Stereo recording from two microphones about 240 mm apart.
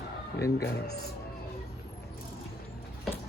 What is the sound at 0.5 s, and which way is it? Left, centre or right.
Speech, left.